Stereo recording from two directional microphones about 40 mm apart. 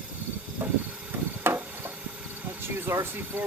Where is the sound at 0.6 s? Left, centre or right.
Right.